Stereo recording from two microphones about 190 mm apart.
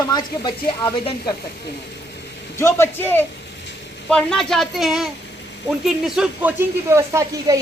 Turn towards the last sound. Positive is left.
turn(degrees=-15)  # may be behind; listen again after turning